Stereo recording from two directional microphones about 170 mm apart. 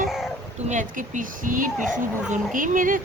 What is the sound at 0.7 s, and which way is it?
Speech, 45° right (ahead or behind).